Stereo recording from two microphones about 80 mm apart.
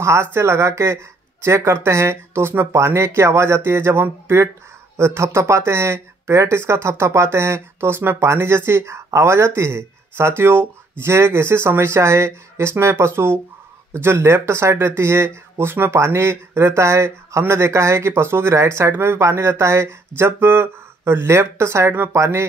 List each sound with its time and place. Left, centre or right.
0.0 s speech: right